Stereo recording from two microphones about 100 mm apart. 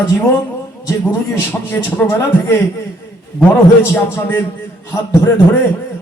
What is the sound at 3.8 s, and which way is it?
Speech, 25° left (ahead or behind).